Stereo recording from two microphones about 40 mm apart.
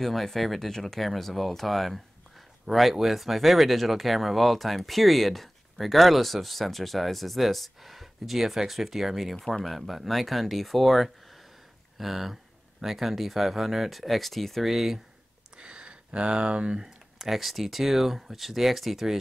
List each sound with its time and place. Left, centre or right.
0.0 s speech: centre
15.5 s a sound: right
16.8 s speech: centre